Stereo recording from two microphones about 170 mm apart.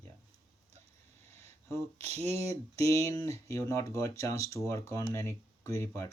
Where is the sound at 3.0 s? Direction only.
20° left (ahead or behind).